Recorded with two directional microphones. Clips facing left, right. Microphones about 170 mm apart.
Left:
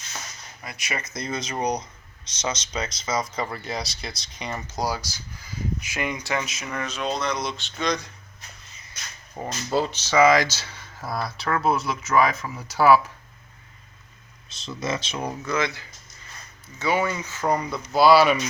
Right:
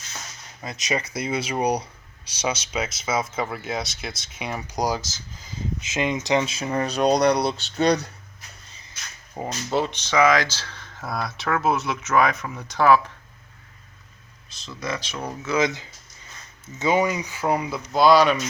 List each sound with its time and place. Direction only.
0.6 s speech: 20° right (ahead or behind)
9.3 s speech: 15° right (ahead or behind)
10.0 s speech: 10° left (ahead or behind)
14.5 s speech: 25° left (ahead or behind)
15.4 s speech: 15° right (ahead or behind)
17.9 s speech: 5° left (ahead or behind)